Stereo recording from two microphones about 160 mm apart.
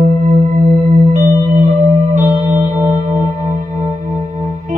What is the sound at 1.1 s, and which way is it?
Music, 50° right (ahead or behind).